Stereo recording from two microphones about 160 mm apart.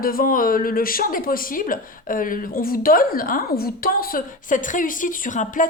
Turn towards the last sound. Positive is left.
turn(degrees=55)  # may be behind; listen again after turning